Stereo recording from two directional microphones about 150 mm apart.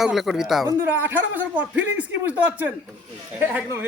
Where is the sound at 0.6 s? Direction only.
15° right (ahead or behind).